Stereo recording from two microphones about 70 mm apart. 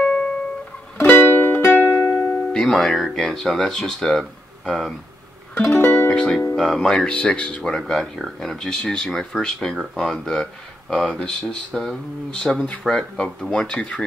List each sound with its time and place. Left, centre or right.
0.0 s music: centre
1.0 s music: left
2.0 s music: centre
2.6 s speech: centre
5.8 s music: left
6.0 s speech: centre
7.8 s speech: centre